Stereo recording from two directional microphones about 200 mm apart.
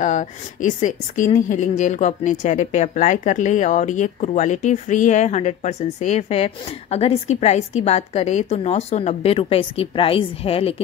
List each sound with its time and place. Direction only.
0.0 s speech: 35° left (ahead or behind)